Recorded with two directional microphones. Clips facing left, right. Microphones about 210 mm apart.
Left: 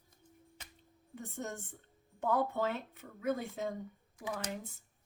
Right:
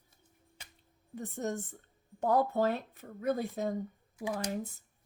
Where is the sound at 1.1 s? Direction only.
40° right (ahead or behind).